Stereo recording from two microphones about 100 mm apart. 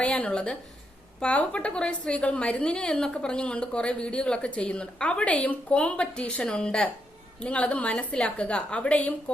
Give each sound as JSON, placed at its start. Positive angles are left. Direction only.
{"t": 0.0, "sound": "a woman's voice", "side_deg": 10}